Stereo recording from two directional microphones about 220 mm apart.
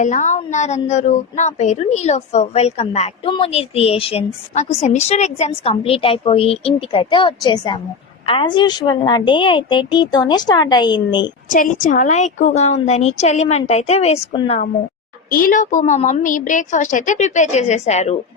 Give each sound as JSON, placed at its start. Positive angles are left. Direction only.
{"t": 0.0, "sound": "a woman's voice", "side_deg": 35}
{"t": 11.4, "sound": "a woman's voice", "side_deg": 35}
{"t": 15.3, "sound": "a woman's voice", "side_deg": 40}